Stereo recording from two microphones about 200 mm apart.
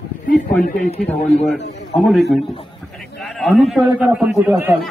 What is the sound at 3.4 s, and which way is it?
A man's voice, centre (ahead or behind).